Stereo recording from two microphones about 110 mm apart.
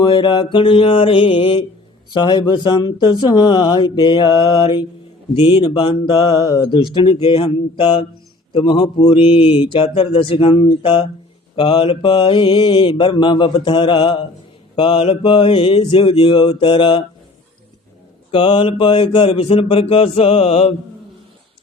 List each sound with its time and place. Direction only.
0.0 s mantra: 40° left (ahead or behind)
2.1 s speech: 45° left (ahead or behind)
3.3 s mantra: 40° left (ahead or behind)
6.3 s mantra: 35° left (ahead or behind)
7.2 s mantra: 60° left (ahead or behind)
9.8 s speech: 55° left (ahead or behind)
11.5 s mantra: 50° left (ahead or behind)
18.3 s speech: 55° left (ahead or behind)